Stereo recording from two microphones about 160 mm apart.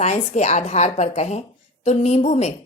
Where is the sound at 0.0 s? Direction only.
45° left (ahead or behind).